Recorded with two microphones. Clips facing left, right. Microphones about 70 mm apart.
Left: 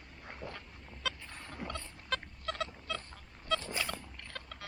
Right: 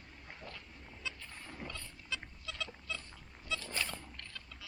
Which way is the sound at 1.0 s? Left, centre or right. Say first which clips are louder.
Left 7 dB; left.